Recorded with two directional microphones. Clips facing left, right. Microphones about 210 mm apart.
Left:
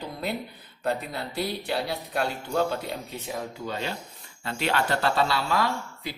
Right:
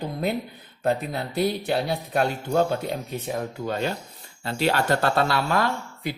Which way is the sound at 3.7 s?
50° right (ahead or behind).